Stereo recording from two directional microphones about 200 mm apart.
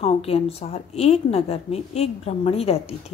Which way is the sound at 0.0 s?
30° left (ahead or behind).